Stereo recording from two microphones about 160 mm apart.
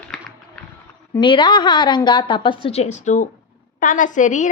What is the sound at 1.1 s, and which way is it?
A woman's voice, 30° left (ahead or behind).